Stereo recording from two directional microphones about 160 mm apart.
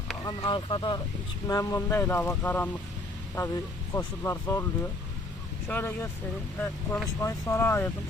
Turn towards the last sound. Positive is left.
turn(degrees=15)  # may be behind; listen again after turning